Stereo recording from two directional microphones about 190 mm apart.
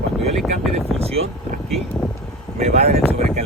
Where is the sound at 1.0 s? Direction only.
30° right (ahead or behind).